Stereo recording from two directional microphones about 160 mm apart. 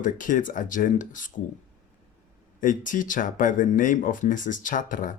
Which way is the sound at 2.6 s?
55° left (ahead or behind).